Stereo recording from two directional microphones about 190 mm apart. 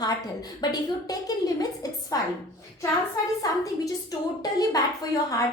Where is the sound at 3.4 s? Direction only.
20° left (ahead or behind).